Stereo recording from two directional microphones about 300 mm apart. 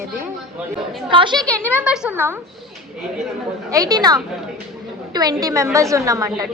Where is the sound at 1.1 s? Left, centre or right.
Centre.